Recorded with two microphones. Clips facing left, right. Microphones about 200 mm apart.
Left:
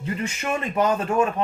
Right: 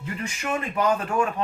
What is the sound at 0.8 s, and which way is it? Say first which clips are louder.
Speech: left 3 dB; 25° left (ahead or behind).